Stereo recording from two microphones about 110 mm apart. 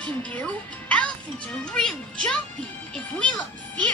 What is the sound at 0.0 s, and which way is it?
Speech, 10° left (ahead or behind).